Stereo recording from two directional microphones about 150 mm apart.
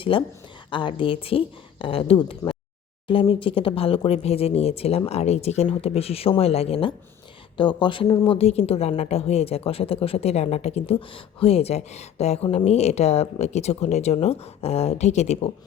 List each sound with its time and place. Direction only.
0.0 s speech: 35° left (ahead or behind)
8.4 s a woman's voice: 45° left (ahead or behind)